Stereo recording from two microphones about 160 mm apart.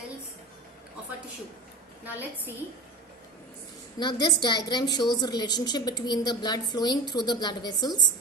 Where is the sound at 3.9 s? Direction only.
30° left (ahead or behind).